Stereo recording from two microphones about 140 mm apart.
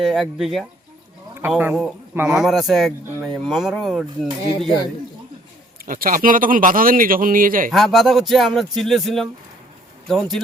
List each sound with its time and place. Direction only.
0.0 s speech: centre (ahead or behind)
1.3 s speech: 15° right (ahead or behind)
5.8 s a man's voice: 85° right
7.7 s speech: centre (ahead or behind)